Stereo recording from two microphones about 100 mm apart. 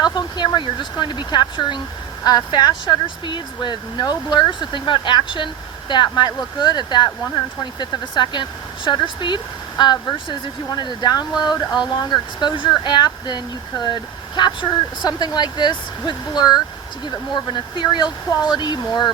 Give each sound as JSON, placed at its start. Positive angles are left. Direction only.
{"t": 0.0, "sound": "speech", "side_deg": 45}